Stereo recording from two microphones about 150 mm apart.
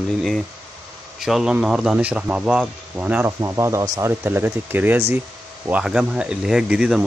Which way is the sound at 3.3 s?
20° right (ahead or behind).